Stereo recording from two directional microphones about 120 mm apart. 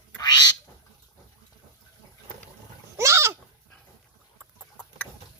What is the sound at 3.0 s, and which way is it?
Goat, 25° right (ahead or behind).